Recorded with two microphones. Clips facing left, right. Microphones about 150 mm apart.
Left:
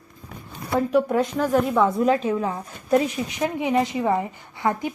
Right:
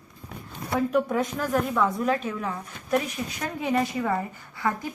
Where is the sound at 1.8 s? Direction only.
30° left (ahead or behind).